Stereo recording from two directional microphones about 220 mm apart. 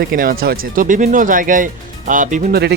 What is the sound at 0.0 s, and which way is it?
Speech, 40° right (ahead or behind).